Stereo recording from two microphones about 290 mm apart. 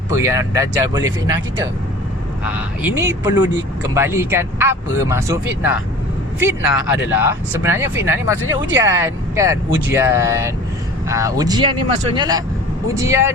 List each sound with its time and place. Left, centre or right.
0.1 s speech: centre
2.4 s speech: centre